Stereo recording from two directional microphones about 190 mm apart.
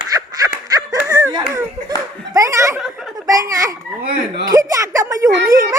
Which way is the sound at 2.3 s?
15° right (ahead or behind).